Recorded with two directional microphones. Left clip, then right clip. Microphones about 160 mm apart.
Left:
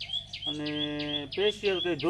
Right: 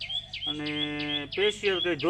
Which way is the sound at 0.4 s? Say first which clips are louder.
Right 2 dB; 10° left (ahead or behind).